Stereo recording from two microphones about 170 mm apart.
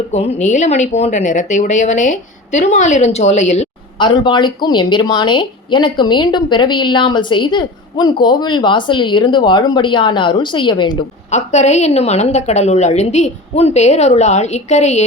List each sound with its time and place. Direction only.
0.1 s a woman's voice: 40° left (ahead or behind)
3.9 s a woman's voice: 25° left (ahead or behind)
11.3 s a woman's voice: 40° left (ahead or behind)